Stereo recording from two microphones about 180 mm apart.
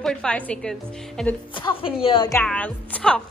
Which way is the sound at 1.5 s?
30° left (ahead or behind).